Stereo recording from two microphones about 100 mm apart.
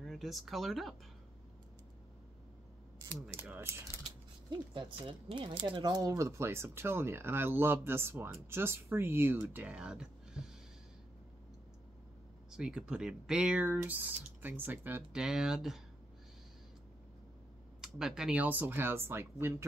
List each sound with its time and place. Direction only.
0.0 s speech: centre (ahead or behind)
3.3 s speech: 20° right (ahead or behind)
4.7 s speech: 55° right (ahead or behind); by 10.5 s 10° right (ahead or behind)
12.4 s speech: 10° right (ahead or behind)
15.1 s speech: 5° right (ahead or behind)
17.7 s speech: 5° right (ahead or behind)
18.4 s speech: 20° right (ahead or behind)